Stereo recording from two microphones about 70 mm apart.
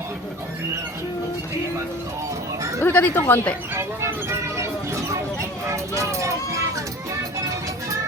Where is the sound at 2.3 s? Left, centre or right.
Right.